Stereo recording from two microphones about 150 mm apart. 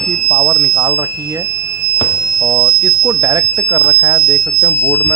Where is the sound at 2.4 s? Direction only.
25° right (ahead or behind).